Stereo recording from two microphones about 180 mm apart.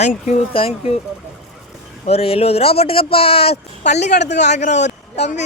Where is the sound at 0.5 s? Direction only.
30° left (ahead or behind).